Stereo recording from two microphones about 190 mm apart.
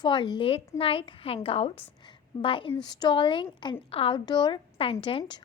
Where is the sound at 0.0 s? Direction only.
25° left (ahead or behind).